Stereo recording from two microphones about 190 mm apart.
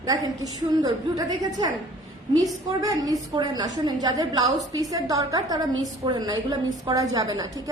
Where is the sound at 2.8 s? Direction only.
20° right (ahead or behind).